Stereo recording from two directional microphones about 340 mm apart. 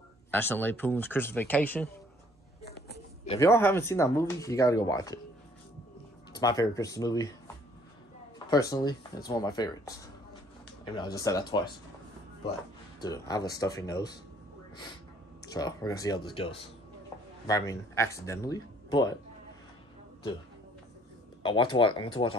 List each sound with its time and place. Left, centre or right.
0.3 s speech: centre
2.6 s a sound: left
3.3 s speech: centre
6.4 s speech: centre
8.5 s speech: centre
11.0 s speech: centre
13.0 s speech: centre
15.5 s speech: centre
21.4 s speech: centre